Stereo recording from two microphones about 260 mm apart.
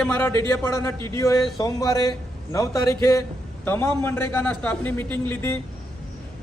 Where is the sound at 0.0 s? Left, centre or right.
Centre.